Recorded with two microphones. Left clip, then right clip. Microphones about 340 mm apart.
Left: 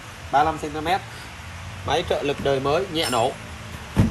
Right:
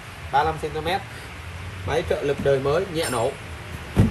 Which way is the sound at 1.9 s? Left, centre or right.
Centre.